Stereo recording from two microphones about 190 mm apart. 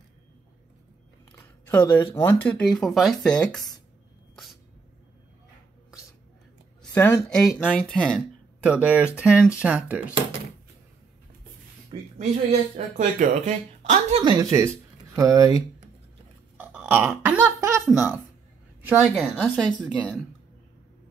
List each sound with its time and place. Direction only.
1.8 s speech: 10° left (ahead or behind)
6.8 s a sound: 10° left (ahead or behind)
7.2 s speech: 5° left (ahead or behind)
8.6 s speech: 5° right (ahead or behind)
11.9 s speech: 25° right (ahead or behind)
12.7 s speech: 40° right (ahead or behind)
14.2 s speech: 20° right (ahead or behind); by 20.2 s 5° left (ahead or behind)